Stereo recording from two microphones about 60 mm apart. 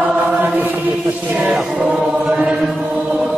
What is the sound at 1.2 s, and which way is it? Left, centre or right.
Music, right.